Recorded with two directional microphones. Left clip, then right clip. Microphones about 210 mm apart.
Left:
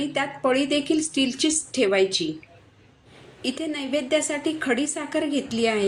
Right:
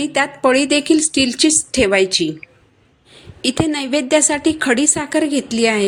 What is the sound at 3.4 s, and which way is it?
A woman's voice, 45° right (ahead or behind).